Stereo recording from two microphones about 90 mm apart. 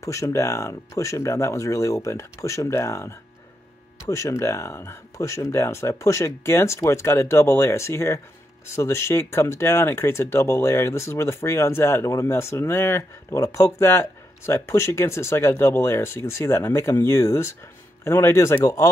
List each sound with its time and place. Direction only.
0.0 s speech: 35° left (ahead or behind)